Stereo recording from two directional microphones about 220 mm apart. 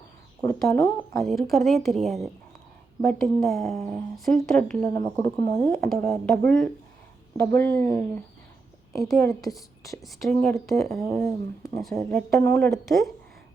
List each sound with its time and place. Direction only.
0.4 s speech: 10° left (ahead or behind)
1.2 s speech: centre (ahead or behind)
4.9 s a woman's voice: 20° left (ahead or behind)
5.7 s a woman's voice: 5° left (ahead or behind)
9.2 s a woman's voice: 15° left (ahead or behind)
10.0 s speech: centre (ahead or behind)
11.9 s a woman's voice: 10° left (ahead or behind)